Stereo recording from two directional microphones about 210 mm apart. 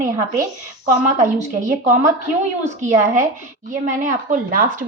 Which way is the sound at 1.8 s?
35° right (ahead or behind).